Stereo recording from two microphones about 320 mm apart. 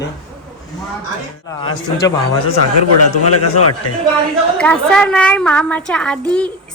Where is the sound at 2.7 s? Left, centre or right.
Left.